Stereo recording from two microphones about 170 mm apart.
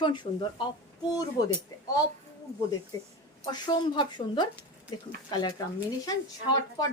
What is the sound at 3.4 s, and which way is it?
Speech, 25° left (ahead or behind).